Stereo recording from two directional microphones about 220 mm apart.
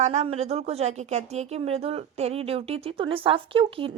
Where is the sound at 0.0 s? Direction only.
30° right (ahead or behind).